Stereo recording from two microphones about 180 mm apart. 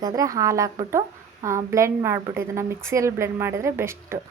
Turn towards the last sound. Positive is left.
turn(degrees=-15)  # may be behind; listen again after turning